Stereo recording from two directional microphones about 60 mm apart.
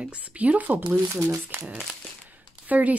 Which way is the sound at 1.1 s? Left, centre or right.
Right.